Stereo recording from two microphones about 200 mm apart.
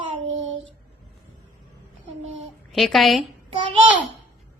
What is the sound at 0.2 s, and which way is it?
Child singing, 70° right (ahead or behind).